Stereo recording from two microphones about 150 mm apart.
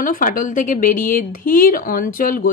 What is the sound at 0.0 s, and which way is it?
Speech, 65° left (ahead or behind).